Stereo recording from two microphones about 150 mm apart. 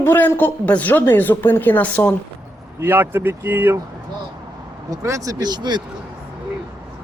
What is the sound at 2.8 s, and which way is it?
Speech, 15° right (ahead or behind).